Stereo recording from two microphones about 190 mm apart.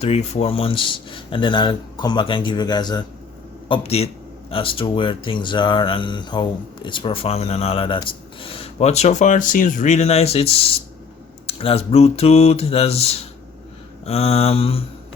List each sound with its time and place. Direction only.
0.0 s speech: 35° left (ahead or behind)
3.7 s speech: 30° left (ahead or behind)